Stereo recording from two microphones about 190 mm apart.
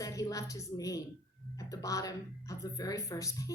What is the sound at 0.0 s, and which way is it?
A woman's voice, 15° left (ahead or behind).